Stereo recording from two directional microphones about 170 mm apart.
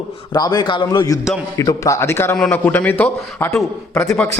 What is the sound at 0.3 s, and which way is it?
A man's voice, 25° left (ahead or behind).